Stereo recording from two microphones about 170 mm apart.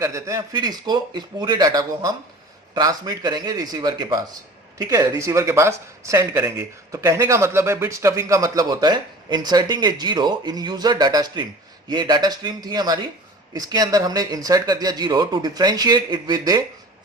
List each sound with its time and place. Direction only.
0.0 s a man's voice: 20° right (ahead or behind)